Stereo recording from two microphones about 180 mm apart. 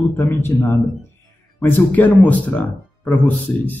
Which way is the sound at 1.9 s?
10° left (ahead or behind).